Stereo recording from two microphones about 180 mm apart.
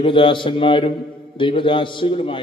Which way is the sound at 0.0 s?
30° left (ahead or behind).